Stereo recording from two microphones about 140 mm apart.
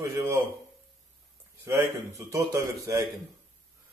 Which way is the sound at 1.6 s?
20° right (ahead or behind).